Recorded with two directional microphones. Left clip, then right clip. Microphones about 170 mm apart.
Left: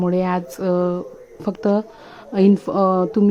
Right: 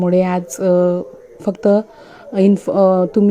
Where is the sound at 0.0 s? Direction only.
20° right (ahead or behind).